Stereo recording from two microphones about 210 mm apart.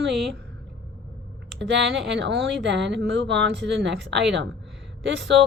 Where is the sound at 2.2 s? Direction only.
55° right (ahead or behind).